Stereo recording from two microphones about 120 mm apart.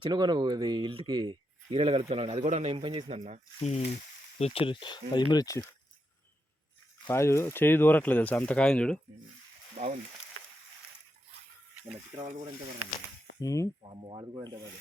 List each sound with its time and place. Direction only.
0.0 s speech: 40° right (ahead or behind); by 2.7 s 65° right (ahead or behind)
2.7 s speech: 50° right (ahead or behind); by 3.4 s 70° right (ahead or behind)
3.6 s speech: 65° left (ahead or behind); by 5.6 s 30° left (ahead or behind)
7.1 s speech: 20° left (ahead or behind); by 9.0 s 5° left (ahead or behind)
9.7 s speech: 75° right (ahead or behind)
12.1 s speech: 50° right (ahead or behind)
13.4 s speech: 25° left (ahead or behind)
13.9 s speech: 45° right (ahead or behind)